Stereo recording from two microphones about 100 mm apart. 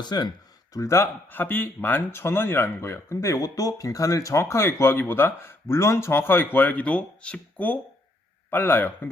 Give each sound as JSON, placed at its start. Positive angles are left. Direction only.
{"t": 0.0, "sound": "speech", "side_deg": 45}
{"t": 0.7, "sound": "speech", "side_deg": 30}
{"t": 1.3, "sound": "speech", "side_deg": 20}